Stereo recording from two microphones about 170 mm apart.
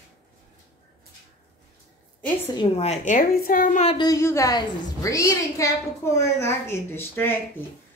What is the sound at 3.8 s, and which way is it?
A woman's voice, 30° left (ahead or behind).